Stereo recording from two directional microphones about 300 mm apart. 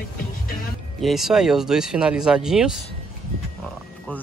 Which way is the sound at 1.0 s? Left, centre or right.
Centre.